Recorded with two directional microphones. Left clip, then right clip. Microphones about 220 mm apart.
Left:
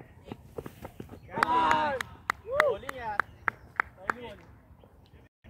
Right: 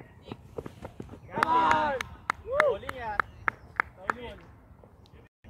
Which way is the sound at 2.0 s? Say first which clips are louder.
Right 1 dB; 15° left (ahead or behind).